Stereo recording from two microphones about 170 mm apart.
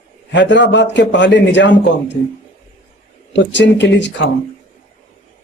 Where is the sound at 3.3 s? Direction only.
90° left.